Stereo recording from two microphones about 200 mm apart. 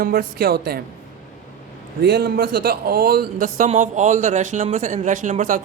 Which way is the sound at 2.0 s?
50° right (ahead or behind).